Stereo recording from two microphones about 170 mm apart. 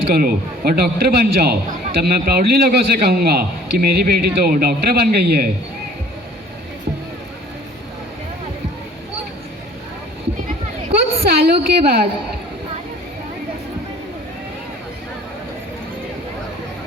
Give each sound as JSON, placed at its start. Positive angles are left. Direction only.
{"t": 0.1, "sound": "a man's voice", "side_deg": -60}
{"t": 11.2, "sound": "a woman's voice", "side_deg": -70}